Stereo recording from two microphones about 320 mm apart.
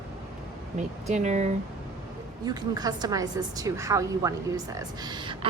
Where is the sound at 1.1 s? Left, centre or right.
Right.